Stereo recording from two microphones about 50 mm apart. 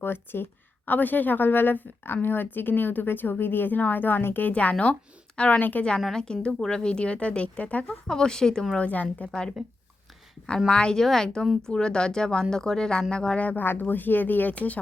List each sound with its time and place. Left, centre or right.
0.0 s a woman's voice: left
0.9 s speech: left
6.1 s speech: centre
8.0 s speech: centre
8.8 s speech: left
10.7 s speech: centre
13.4 s speech: left